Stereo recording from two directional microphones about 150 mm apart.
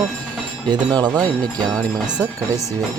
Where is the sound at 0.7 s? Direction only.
25° right (ahead or behind).